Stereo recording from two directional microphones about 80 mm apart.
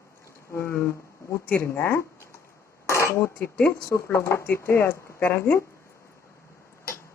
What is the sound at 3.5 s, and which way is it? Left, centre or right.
Speech, centre.